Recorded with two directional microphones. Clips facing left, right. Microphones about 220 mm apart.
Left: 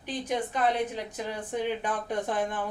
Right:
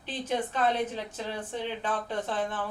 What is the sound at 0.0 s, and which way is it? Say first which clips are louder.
A woman's voice: even; 15° left (ahead or behind).